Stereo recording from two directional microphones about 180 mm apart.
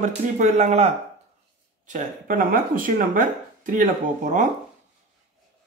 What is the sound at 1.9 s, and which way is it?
Speech, 50° right (ahead or behind).